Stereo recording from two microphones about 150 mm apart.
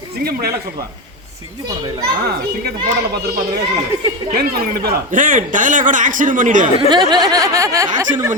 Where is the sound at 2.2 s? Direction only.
90° right.